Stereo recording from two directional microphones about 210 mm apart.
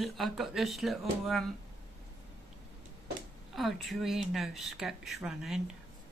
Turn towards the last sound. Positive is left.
turn(degrees=-5)  # may be behind; listen again after turning